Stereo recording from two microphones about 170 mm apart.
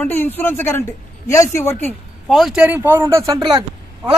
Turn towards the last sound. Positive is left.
turn(degrees=-25)  # may be behind; listen again after turning